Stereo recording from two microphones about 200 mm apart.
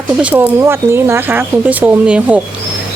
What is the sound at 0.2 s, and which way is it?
Speech, 5° right (ahead or behind).